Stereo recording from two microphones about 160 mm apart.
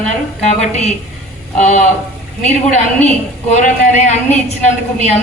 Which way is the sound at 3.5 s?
45° left (ahead or behind).